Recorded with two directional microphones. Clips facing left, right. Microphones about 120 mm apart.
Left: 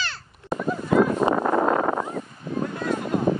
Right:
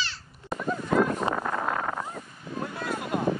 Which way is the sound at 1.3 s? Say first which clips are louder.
Left 8 dB; 35° left (ahead or behind).